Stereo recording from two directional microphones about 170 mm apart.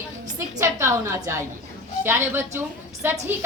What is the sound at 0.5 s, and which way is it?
A woman's voice, 15° right (ahead or behind).